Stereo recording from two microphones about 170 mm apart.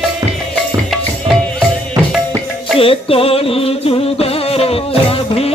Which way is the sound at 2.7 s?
35° left (ahead or behind).